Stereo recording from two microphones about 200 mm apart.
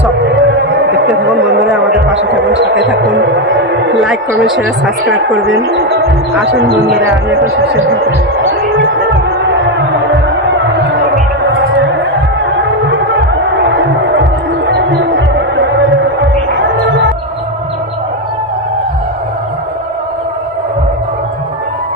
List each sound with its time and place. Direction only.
0.3 s hum: 60° right (ahead or behind)
2.5 s speech: 65° right (ahead or behind)
3.9 s speech: centre (ahead or behind)
5.0 s a man's voice: 65° right (ahead or behind)
7.1 s speech: 75° right (ahead or behind)
9.0 s music: 60° right (ahead or behind)
11.4 s a sound: 60° right (ahead or behind)
13.0 s music: 60° right (ahead or behind)